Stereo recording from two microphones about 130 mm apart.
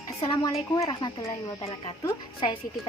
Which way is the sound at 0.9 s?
35° left (ahead or behind).